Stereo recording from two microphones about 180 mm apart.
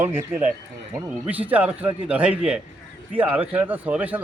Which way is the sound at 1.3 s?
10° right (ahead or behind).